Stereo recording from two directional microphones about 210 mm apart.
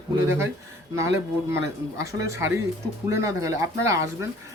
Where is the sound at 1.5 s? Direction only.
15° right (ahead or behind).